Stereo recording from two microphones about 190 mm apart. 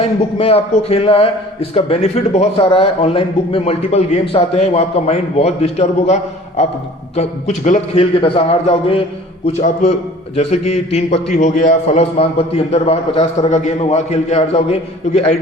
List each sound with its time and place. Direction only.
0.0 s a man's voice: 30° left (ahead or behind)
7.2 s a man's voice: 35° left (ahead or behind)